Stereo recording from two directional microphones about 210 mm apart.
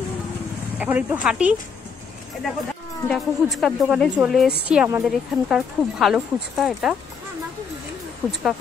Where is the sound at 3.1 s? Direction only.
Centre (ahead or behind).